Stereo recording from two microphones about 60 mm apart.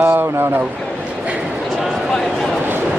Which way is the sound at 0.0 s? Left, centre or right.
Right.